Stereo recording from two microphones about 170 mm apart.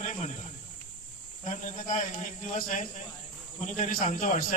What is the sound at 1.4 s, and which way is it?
A man's voice, 45° left (ahead or behind).